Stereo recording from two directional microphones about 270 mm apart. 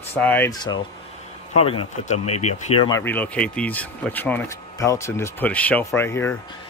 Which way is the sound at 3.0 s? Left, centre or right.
Centre.